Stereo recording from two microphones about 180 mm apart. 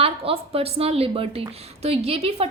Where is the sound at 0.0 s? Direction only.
30° right (ahead or behind).